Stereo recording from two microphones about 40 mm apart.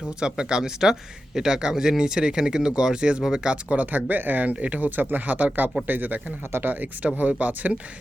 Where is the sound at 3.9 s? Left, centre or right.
Right.